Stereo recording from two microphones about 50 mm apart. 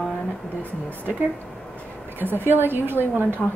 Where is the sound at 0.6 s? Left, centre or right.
Left.